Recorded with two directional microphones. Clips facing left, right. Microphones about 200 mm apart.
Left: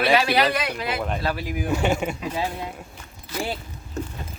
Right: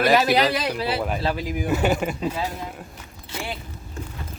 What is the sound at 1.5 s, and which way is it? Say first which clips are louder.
Speech: right 1 dB; centre (ahead or behind).